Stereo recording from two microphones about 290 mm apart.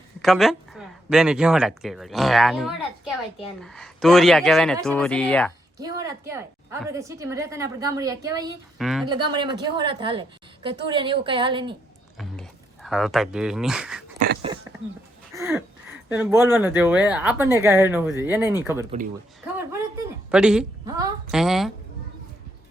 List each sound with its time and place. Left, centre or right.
0.2 s speech: centre
5.8 s a woman's voice: centre
8.8 s speech: centre
9.0 s a woman's voice: centre
12.1 s a sound: centre
14.5 s a sound: centre
16.0 s a woman's voice: centre
20.3 s a woman's voice: centre
21.3 s speech: centre